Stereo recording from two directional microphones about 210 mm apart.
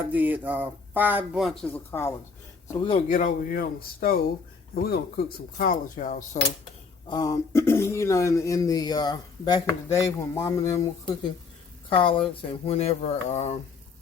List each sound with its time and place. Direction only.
0.0 s speech: 10° right (ahead or behind); by 2.1 s 10° left (ahead or behind)
2.8 s speech: 25° left (ahead or behind)
3.2 s speech: 40° left (ahead or behind)
7.1 s speech: 20° left (ahead or behind)